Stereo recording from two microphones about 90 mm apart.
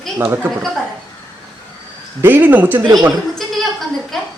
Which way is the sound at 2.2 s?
25° right (ahead or behind).